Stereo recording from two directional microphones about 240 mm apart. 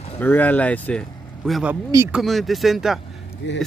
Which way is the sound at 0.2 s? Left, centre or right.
Centre.